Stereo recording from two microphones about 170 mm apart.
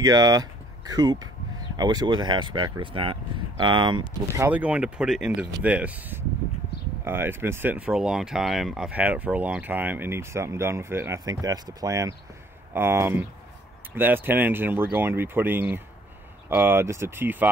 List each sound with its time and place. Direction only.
0.0 s speech: 25° right (ahead or behind)
4.3 s speech: 15° right (ahead or behind)